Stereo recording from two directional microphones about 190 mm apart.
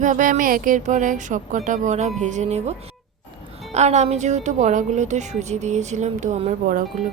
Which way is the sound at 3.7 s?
35° right (ahead or behind).